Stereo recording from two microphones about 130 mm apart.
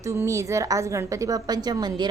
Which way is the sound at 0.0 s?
25° right (ahead or behind).